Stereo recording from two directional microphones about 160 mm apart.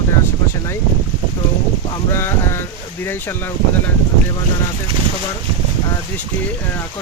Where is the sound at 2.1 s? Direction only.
15° left (ahead or behind).